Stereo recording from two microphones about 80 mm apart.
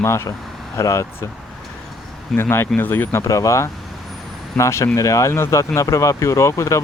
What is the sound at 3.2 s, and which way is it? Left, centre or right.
Speech, left.